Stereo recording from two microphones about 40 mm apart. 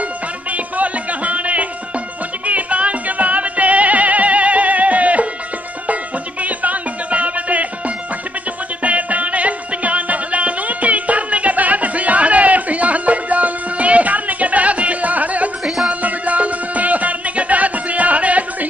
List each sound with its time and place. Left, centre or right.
0.5 s music: right
6.4 s music: right
8.8 s music: right